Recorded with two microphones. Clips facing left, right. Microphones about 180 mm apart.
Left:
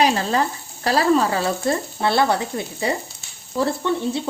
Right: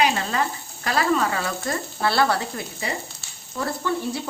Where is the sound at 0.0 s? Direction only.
35° left (ahead or behind).